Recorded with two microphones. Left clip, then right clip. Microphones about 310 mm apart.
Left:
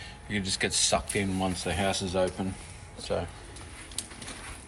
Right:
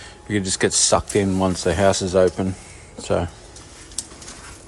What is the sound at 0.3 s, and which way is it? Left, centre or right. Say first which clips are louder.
Speech: right 8 dB; right.